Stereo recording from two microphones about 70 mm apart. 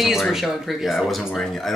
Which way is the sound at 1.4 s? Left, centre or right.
Centre.